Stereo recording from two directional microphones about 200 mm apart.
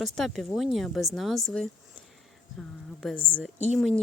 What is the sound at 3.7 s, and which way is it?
Speech, centre (ahead or behind).